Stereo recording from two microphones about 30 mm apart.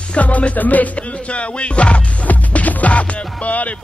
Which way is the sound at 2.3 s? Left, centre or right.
Left.